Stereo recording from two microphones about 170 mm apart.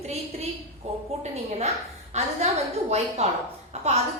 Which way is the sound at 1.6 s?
40° right (ahead or behind).